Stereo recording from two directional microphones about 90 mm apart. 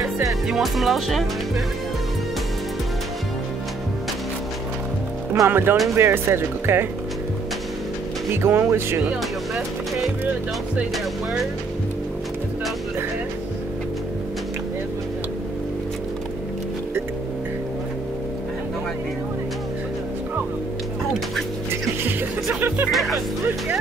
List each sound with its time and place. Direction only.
0.5 s speech: centre (ahead or behind)
5.5 s speech: 25° right (ahead or behind)
8.4 s speech: 25° right (ahead or behind)
22.8 s speech: centre (ahead or behind)